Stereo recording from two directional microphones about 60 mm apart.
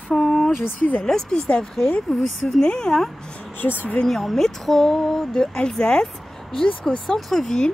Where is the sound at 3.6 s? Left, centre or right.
Left.